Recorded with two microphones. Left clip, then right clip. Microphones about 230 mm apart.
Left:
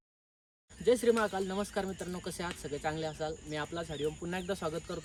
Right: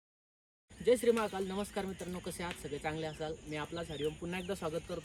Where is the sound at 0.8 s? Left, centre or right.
Centre.